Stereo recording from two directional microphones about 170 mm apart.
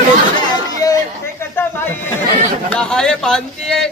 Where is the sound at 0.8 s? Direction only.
20° left (ahead or behind).